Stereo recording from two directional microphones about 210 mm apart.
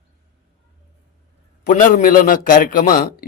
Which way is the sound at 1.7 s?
40° left (ahead or behind).